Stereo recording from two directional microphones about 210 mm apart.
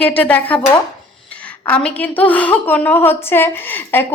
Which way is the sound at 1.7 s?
5° left (ahead or behind).